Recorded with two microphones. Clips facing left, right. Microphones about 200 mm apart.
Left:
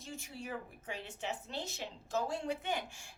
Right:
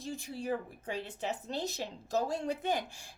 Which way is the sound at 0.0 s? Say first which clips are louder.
Right 7 dB; 35° right (ahead or behind).